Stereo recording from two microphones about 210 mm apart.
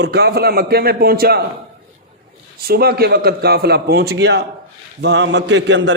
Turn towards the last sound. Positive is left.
turn(degrees=-60)  # may be behind; listen again after turning